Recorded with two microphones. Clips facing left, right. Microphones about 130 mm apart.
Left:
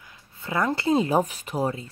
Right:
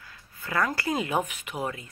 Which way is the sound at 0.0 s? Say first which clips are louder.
Left 2 dB; 20° left (ahead or behind).